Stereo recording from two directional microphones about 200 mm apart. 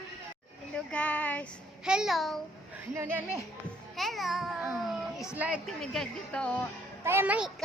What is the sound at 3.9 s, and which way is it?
A child's voice, centre (ahead or behind).